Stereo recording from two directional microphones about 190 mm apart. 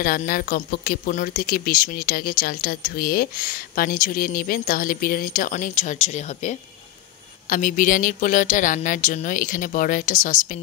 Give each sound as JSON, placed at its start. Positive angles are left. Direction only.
{"t": 0.0, "sound": "speech", "side_deg": 50}